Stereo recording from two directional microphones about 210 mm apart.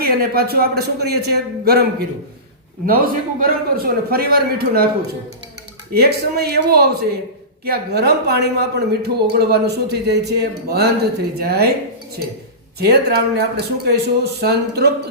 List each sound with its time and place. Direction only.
0.0 s speech: 50° right (ahead or behind)
5.9 s speech: 50° right (ahead or behind)
12.8 s speech: 50° right (ahead or behind)